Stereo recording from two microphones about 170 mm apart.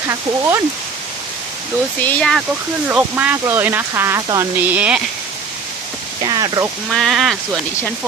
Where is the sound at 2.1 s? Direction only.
Centre (ahead or behind).